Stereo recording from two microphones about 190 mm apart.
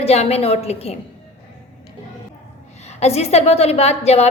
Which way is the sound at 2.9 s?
35° left (ahead or behind).